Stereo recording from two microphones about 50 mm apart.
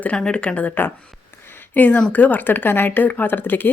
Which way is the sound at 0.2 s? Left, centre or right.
Left.